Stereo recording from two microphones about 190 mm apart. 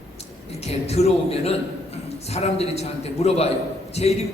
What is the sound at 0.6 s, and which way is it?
A man's voice, 35° left (ahead or behind).